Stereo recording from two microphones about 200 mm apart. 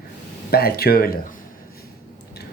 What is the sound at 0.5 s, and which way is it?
Speech, 50° left (ahead or behind).